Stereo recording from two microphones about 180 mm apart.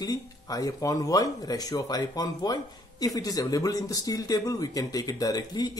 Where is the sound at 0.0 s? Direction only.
20° left (ahead or behind).